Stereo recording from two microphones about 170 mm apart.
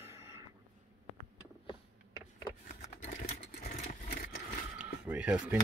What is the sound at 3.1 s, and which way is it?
Vehicle, 60° left (ahead or behind).